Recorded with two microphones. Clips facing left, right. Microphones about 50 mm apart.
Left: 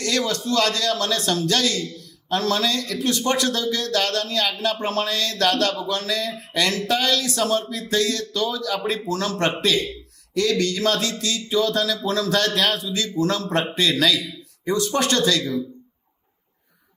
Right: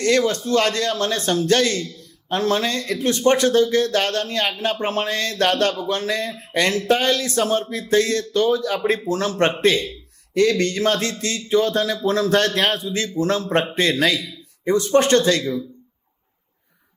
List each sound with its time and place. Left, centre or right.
0.0 s speech: right